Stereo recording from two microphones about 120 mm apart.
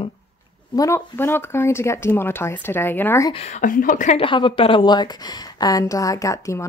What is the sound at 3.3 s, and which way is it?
Speech, 80° left.